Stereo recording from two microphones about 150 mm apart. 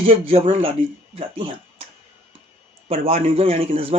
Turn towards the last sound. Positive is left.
turn(degrees=-40)  # may be behind; listen again after turning